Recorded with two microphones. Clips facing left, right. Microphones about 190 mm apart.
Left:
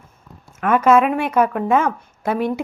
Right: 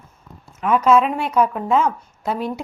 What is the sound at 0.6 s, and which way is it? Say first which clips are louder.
A woman's voice: left 1 dB; 55° left (ahead or behind).